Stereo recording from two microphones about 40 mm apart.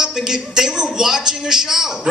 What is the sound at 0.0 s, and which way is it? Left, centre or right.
A man's voice, centre.